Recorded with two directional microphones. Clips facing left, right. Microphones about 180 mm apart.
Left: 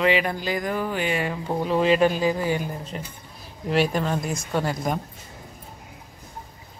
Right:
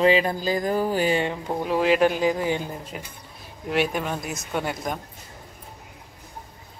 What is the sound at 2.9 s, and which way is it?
Speech, 5° right (ahead or behind).